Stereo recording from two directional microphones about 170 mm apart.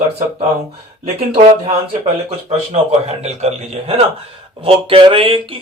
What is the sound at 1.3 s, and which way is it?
Speech, 40° right (ahead or behind).